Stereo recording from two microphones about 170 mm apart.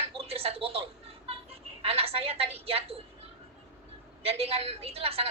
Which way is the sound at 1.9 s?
35° right (ahead or behind).